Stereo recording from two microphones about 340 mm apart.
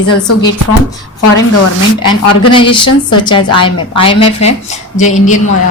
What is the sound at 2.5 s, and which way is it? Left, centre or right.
A woman's voice, centre.